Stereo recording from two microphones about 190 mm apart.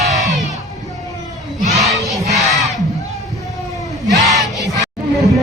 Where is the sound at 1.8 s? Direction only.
Centre (ahead or behind).